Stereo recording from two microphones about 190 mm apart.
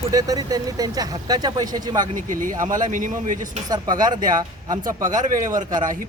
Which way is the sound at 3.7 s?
20° right (ahead or behind).